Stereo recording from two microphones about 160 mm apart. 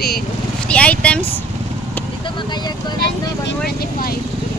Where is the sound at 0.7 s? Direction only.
5° left (ahead or behind).